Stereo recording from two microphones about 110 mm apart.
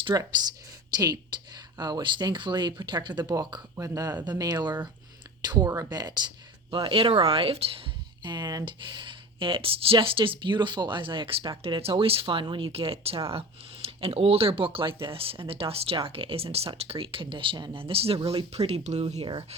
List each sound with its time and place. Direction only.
0.0 s speech: 35° right (ahead or behind); by 7.8 s 60° right (ahead or behind)
8.2 s speech: 45° right (ahead or behind)